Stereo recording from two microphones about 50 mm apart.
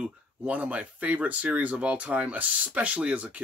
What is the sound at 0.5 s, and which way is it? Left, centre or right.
Speech, right.